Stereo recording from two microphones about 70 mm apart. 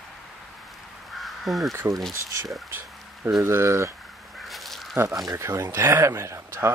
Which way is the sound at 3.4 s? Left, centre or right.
Right.